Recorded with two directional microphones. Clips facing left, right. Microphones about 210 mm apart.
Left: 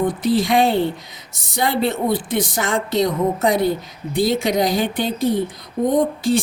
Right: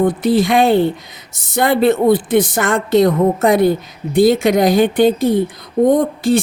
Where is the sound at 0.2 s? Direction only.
55° right (ahead or behind).